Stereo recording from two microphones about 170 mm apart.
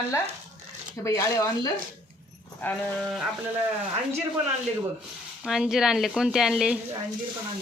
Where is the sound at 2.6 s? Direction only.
5° left (ahead or behind).